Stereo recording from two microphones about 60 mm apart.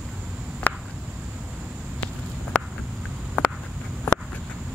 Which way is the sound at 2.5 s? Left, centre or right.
Centre.